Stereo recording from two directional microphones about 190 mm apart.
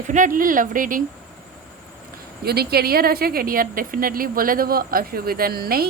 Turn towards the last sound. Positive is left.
turn(degrees=-55)  # may be behind; listen again after turning